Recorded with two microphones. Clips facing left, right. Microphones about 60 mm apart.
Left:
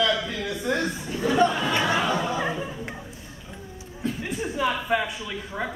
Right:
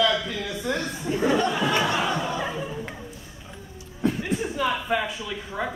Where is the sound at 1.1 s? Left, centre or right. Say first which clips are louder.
Right 7 dB; right.